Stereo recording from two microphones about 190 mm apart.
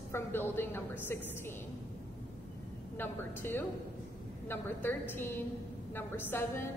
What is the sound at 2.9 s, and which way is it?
A woman's voice, 10° left (ahead or behind).